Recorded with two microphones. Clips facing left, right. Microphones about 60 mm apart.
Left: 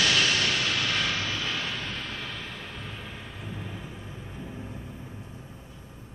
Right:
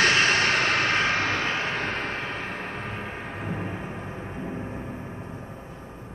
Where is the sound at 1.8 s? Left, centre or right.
Right.